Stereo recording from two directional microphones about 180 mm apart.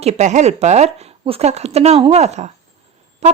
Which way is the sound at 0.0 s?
40° right (ahead or behind).